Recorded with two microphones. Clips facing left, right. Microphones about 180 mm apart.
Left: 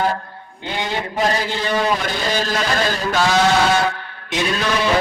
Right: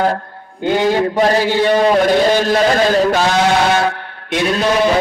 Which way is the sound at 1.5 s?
65° right (ahead or behind).